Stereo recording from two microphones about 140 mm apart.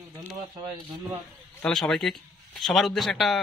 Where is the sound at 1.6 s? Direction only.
Centre (ahead or behind).